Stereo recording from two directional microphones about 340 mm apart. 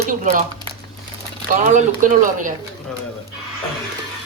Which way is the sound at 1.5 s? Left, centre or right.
Right.